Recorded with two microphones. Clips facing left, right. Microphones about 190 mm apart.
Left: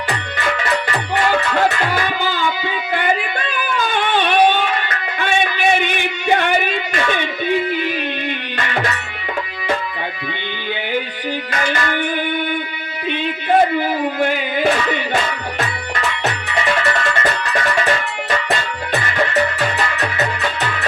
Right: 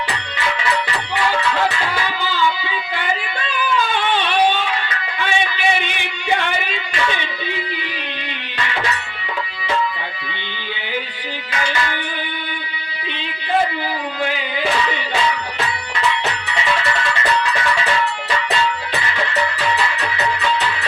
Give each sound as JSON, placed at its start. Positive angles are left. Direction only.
{"t": 0.1, "sound": "music", "side_deg": 50}
{"t": 11.5, "sound": "music", "side_deg": 50}
{"t": 14.2, "sound": "music", "side_deg": 50}